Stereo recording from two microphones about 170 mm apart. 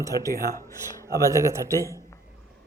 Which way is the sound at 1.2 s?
15° right (ahead or behind).